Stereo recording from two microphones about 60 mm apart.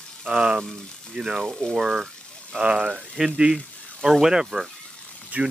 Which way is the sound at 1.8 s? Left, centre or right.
Centre.